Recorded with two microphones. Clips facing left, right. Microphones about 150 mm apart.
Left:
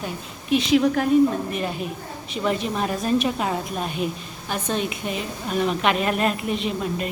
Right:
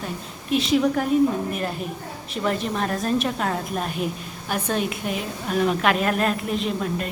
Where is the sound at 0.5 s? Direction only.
Centre (ahead or behind).